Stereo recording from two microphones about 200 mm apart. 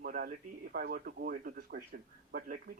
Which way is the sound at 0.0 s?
45° right (ahead or behind).